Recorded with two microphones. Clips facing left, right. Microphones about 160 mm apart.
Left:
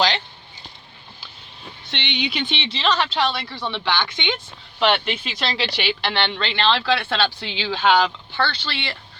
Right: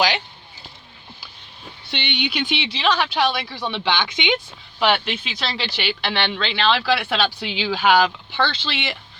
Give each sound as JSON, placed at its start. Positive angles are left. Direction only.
{"t": 1.9, "sound": "speech", "side_deg": -5}
{"t": 4.8, "sound": "speech", "side_deg": -5}
{"t": 8.3, "sound": "speech", "side_deg": -20}